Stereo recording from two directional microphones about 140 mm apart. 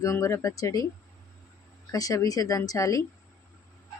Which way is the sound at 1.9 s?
25° left (ahead or behind).